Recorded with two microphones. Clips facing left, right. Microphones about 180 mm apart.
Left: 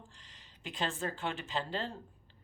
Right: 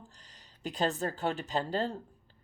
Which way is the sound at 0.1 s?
40° right (ahead or behind).